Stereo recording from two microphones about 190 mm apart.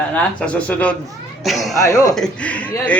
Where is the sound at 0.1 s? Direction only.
5° left (ahead or behind).